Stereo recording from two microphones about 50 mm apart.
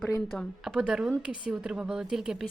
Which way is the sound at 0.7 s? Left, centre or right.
Centre.